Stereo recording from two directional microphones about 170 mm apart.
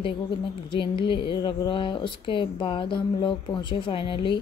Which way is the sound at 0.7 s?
30° left (ahead or behind).